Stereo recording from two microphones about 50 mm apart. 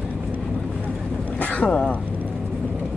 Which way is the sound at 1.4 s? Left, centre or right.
Left.